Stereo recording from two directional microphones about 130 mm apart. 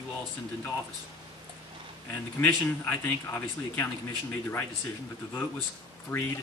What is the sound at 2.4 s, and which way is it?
A man's voice, 15° left (ahead or behind).